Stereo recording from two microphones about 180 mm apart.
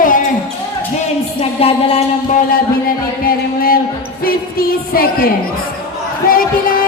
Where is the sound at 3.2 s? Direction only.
55° left (ahead or behind).